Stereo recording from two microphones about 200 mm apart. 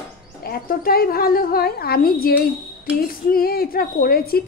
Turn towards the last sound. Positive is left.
turn(degrees=50)  # may be behind; listen again after turning